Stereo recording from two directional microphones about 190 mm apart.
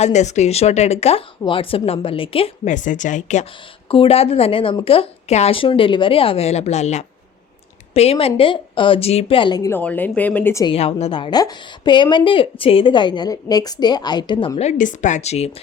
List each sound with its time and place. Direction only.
0.0 s a woman's voice: 35° left (ahead or behind)
2.7 s a woman's voice: 40° left (ahead or behind)
3.8 s a woman's voice: 30° left (ahead or behind); by 10.7 s 15° left (ahead or behind)
10.7 s a woman's voice: 30° left (ahead or behind)
14.5 s a woman's voice: 40° left (ahead or behind)